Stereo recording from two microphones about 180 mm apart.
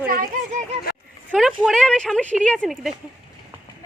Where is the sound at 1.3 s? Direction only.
Centre (ahead or behind).